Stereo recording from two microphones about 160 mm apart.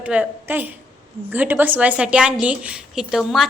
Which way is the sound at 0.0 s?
10° right (ahead or behind).